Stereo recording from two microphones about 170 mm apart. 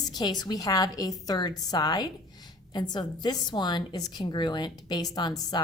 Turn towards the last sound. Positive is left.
turn(degrees=25)  # may be behind; listen again after turning